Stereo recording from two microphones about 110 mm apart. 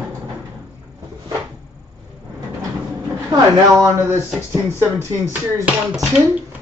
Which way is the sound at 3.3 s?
35° right (ahead or behind).